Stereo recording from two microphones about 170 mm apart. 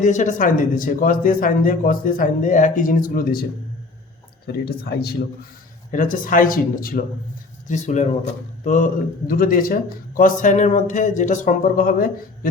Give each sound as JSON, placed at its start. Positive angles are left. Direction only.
{"t": 0.0, "sound": "a man's voice", "side_deg": 45}
{"t": 4.4, "sound": "speech", "side_deg": 65}
{"t": 5.9, "sound": "speech", "side_deg": 50}
{"t": 7.7, "sound": "a man's voice", "side_deg": 45}